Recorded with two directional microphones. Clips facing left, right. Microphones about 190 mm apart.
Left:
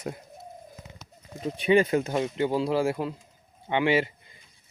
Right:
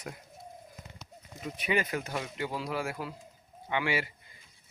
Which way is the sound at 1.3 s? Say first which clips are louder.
Left 9 dB; 30° left (ahead or behind).